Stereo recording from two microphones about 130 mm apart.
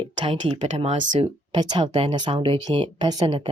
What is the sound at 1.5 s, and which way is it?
Speech, 35° right (ahead or behind).